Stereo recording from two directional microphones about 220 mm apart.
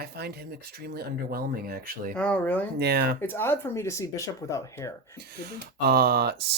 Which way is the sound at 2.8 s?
50° right (ahead or behind).